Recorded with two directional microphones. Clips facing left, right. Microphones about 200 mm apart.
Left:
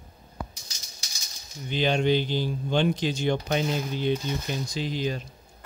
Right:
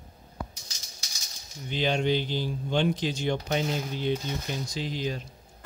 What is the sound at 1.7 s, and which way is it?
Speech, 65° left (ahead or behind).